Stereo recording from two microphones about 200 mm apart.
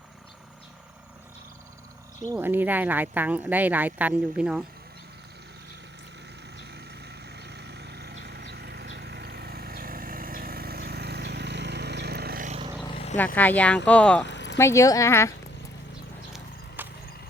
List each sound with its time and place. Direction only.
2.3 s speech: 10° right (ahead or behind)
7.3 s vehicle: 55° right (ahead or behind)
12.8 s wild animals: 30° left (ahead or behind)
13.1 s speech: 10° left (ahead or behind)
14.3 s vehicle: 60° left (ahead or behind)
14.6 s speech: 15° left (ahead or behind)
16.3 s horse: 10° right (ahead or behind)